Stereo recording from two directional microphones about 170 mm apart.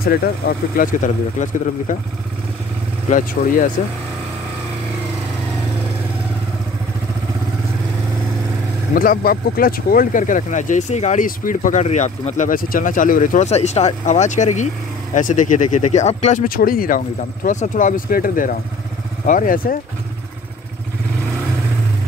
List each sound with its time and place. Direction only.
0.0 s speech: 60° left (ahead or behind)
3.1 s speech: 45° left (ahead or behind)
8.9 s speech: 55° left (ahead or behind)